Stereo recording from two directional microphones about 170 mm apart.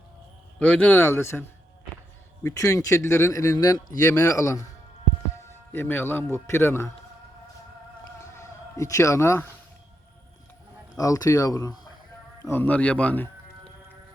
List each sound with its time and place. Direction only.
0.6 s a man's voice: 5° left (ahead or behind)
8.4 s speech: 20° left (ahead or behind)
10.9 s speech: 20° left (ahead or behind)